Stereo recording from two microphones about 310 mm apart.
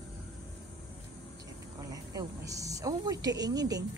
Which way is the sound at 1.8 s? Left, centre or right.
Centre.